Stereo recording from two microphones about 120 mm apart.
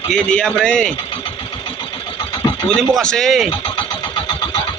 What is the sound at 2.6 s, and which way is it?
Speech, 5° left (ahead or behind).